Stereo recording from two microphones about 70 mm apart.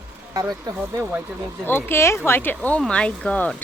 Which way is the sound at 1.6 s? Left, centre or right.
Left.